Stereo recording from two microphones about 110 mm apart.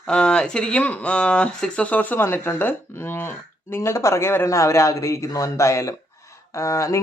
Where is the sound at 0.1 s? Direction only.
10° left (ahead or behind).